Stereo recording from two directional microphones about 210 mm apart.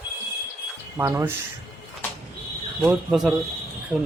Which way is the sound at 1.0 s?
10° right (ahead or behind).